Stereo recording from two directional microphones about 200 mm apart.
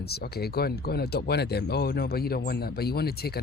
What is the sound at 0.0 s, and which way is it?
Speech, 50° left (ahead or behind).